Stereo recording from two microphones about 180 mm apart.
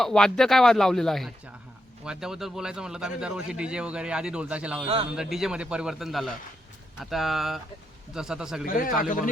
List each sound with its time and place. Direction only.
0.0 s speech: 5° left (ahead or behind)
8.6 s speech: 50° left (ahead or behind)